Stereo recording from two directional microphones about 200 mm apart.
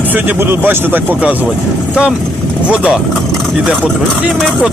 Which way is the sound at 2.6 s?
5° right (ahead or behind).